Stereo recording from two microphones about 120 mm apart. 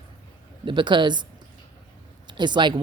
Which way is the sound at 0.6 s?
40° right (ahead or behind).